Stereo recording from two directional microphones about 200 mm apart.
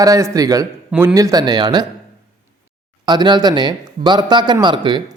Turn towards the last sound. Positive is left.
turn(degrees=-25)  # may be behind; listen again after turning